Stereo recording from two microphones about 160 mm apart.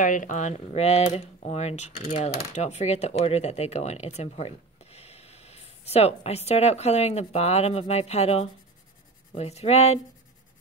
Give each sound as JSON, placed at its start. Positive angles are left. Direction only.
{"t": 0.0, "sound": "speech", "side_deg": 55}